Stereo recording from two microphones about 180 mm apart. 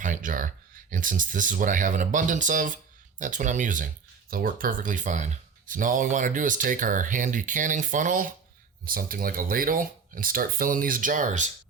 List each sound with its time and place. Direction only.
0.0 s speech: 45° right (ahead or behind)